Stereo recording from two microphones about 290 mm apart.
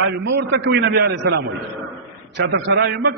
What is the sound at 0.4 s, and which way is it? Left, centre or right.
Speech, right.